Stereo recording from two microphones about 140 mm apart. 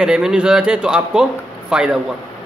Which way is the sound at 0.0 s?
5° right (ahead or behind).